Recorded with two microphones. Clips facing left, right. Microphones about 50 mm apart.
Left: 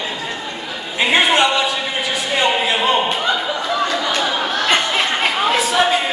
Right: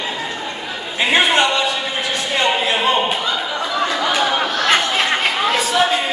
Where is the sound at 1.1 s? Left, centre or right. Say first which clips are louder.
Left 1 dB; centre.